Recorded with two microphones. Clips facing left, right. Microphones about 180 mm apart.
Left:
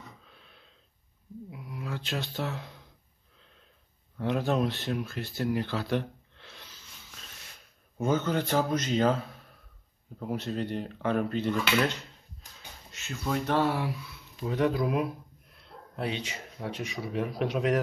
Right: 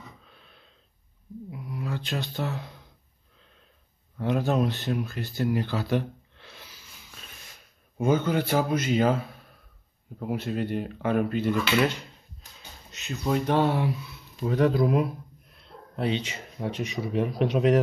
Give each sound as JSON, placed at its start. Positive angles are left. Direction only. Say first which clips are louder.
{"t": 0.3, "sound": "a sound", "louder": "right 1 dB", "side_deg": 0}
{"t": 4.2, "sound": "speech", "louder": "right 2 dB", "side_deg": 0}
{"t": 8.0, "sound": "speech", "louder": "right 3 dB", "side_deg": -10}
{"t": 16.0, "sound": "speech", "louder": "right 5 dB", "side_deg": -25}